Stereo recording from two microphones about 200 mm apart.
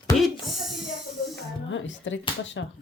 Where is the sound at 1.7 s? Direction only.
70° left (ahead or behind).